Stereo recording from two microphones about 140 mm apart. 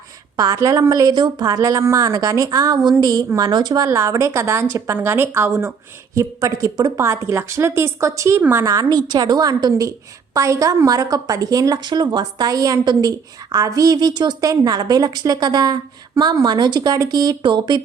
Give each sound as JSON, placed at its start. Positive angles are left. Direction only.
{"t": 0.3, "sound": "a woman's voice", "side_deg": -25}
{"t": 3.8, "sound": "a woman's voice", "side_deg": -20}